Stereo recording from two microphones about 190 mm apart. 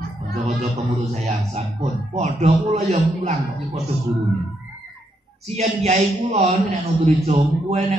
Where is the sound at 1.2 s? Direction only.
35° right (ahead or behind).